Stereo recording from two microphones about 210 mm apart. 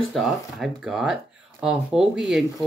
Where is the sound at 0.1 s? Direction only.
Centre (ahead or behind).